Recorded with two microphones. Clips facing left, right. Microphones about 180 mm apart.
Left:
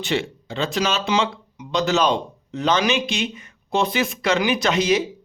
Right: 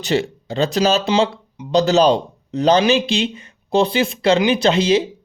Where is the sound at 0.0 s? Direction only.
40° right (ahead or behind).